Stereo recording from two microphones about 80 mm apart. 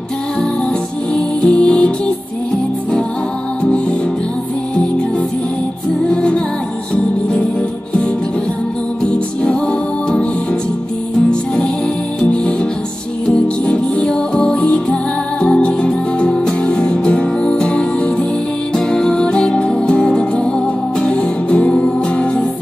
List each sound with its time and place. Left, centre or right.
1.1 s music: centre
6.0 s music: centre
9.0 s music: centre
11.2 s music: centre
13.7 s music: centre